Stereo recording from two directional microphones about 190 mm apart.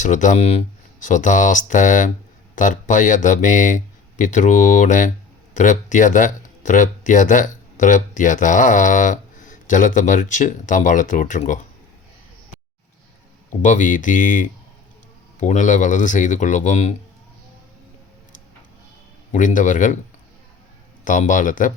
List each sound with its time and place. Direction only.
0.0 s speech: 40° left (ahead or behind)
13.6 s speech: 40° left (ahead or behind)
19.3 s speech: 40° left (ahead or behind)
21.0 s speech: 40° left (ahead or behind)